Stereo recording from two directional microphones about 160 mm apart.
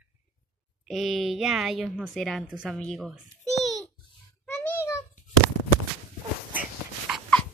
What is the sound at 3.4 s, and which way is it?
Babbling, 45° left (ahead or behind).